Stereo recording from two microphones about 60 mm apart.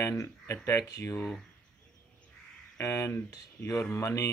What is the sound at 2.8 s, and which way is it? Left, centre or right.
Speech, left.